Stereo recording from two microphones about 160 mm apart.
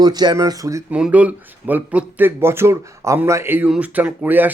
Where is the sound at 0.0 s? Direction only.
25° right (ahead or behind).